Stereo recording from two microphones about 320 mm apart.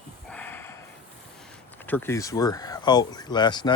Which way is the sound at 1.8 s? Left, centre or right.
Centre.